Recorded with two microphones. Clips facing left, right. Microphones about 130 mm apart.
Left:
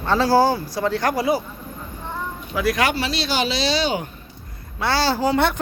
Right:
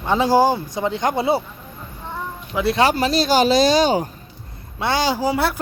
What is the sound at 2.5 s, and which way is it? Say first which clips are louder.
Speech: right 3 dB; 25° right (ahead or behind).